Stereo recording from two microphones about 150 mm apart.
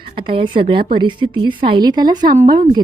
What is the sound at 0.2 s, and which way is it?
A woman's voice, 35° right (ahead or behind).